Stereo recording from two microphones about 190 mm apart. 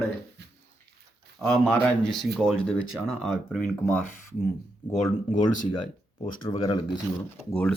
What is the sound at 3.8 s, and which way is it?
Speech, 10° left (ahead or behind).